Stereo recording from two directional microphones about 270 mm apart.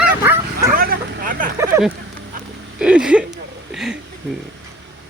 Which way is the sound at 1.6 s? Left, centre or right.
Centre.